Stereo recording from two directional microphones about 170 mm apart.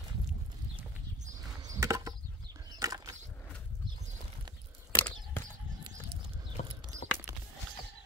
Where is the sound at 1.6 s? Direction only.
20° right (ahead or behind).